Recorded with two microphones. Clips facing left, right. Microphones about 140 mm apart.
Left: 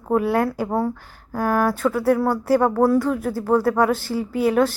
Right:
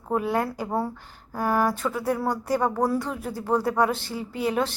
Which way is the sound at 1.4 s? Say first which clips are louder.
Left 4 dB; 5° right (ahead or behind).